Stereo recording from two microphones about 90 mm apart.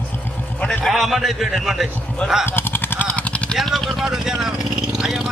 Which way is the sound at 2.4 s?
25° left (ahead or behind).